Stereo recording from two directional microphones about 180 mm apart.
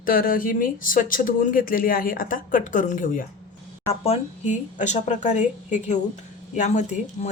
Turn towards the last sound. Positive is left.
turn(degrees=40)  # may be behind; listen again after turning